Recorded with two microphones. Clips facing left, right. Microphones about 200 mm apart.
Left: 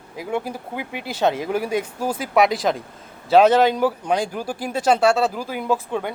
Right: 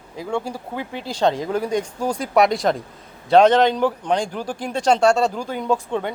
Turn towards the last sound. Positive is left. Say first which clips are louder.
# right 1 dB
turn(degrees=5)  # may be behind; listen again after turning